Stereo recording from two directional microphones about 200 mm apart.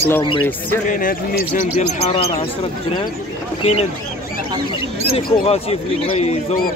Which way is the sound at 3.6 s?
30° left (ahead or behind).